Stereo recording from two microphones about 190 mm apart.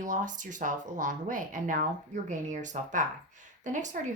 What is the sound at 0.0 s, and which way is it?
Speech, 45° right (ahead or behind).